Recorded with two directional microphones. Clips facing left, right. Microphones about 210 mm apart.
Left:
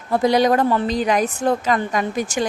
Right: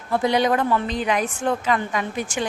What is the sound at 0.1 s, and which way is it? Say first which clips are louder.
A woman's voice: left 4 dB; 40° left (ahead or behind).